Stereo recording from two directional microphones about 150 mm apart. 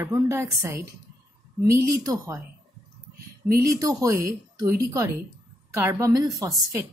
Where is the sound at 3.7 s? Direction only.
20° right (ahead or behind).